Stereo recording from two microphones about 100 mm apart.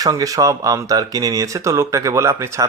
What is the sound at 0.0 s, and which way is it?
Speech, 35° right (ahead or behind).